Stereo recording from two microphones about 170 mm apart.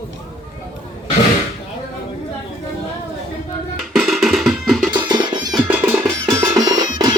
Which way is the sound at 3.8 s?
Centre (ahead or behind).